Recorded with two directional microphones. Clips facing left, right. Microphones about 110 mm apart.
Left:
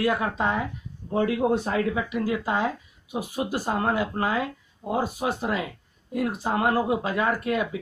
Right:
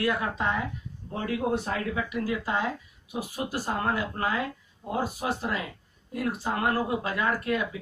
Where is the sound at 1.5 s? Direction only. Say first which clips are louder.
Left 5 dB; 25° left (ahead or behind).